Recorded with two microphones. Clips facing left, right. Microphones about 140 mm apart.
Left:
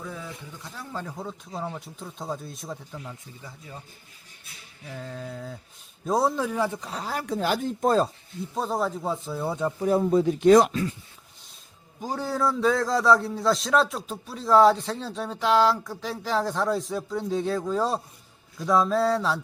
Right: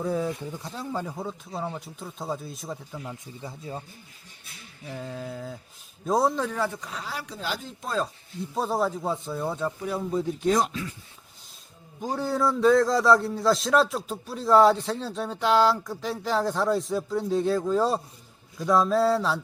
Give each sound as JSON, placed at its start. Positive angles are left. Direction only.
{"t": 0.0, "sound": "speech", "side_deg": -35}
{"t": 1.0, "sound": "a man's voice", "side_deg": -5}
{"t": 3.4, "sound": "speech", "side_deg": -30}
{"t": 4.9, "sound": "a man's voice", "side_deg": -5}
{"t": 6.8, "sound": "speech", "side_deg": 40}
{"t": 8.5, "sound": "a man's voice", "side_deg": 0}
{"t": 10.1, "sound": "speech", "side_deg": 75}
{"t": 11.9, "sound": "a man's voice", "side_deg": 0}